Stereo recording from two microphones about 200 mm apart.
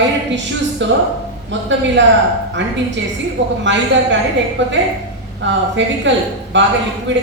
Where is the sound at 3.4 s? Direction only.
65° right (ahead or behind).